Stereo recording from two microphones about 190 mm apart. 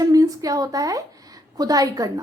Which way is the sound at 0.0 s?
20° right (ahead or behind).